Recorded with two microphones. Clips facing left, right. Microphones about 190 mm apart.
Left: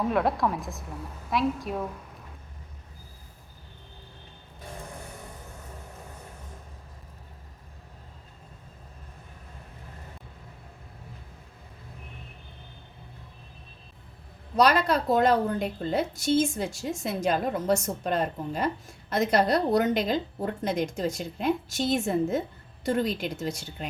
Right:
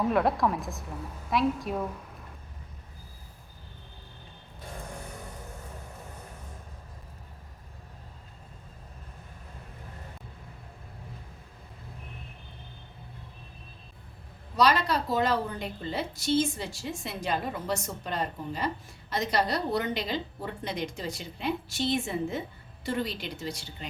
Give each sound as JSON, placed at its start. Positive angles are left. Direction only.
{"t": 0.0, "sound": "a woman's voice", "side_deg": 0}
{"t": 14.5, "sound": "a woman's voice", "side_deg": 50}